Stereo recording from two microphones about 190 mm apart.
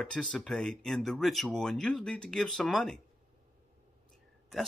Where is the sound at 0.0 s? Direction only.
5° left (ahead or behind).